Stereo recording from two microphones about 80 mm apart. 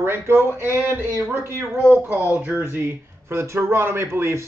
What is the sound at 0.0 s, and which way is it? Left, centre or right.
Speech, right.